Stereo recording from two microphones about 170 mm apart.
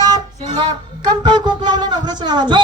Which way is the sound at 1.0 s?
25° right (ahead or behind).